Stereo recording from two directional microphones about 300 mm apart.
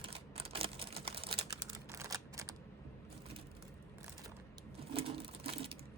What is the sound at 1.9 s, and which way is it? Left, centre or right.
Typing, centre.